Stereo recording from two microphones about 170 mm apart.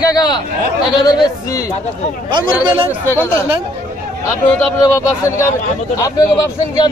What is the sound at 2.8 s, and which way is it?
Speech, 15° left (ahead or behind).